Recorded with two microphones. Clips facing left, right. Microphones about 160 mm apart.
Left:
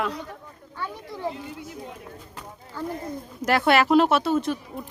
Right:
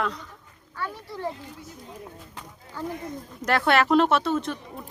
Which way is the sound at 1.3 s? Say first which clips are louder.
Left 5 dB; 75° left (ahead or behind).